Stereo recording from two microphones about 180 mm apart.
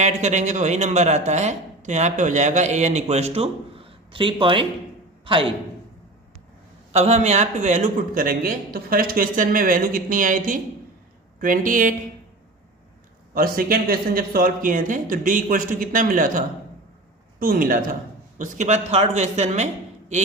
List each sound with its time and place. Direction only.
0.0 s a man's voice: 40° right (ahead or behind)
6.9 s a man's voice: 35° right (ahead or behind)
13.3 s a man's voice: 55° right (ahead or behind)
17.4 s a man's voice: 50° right (ahead or behind)
18.3 s speech: 40° right (ahead or behind)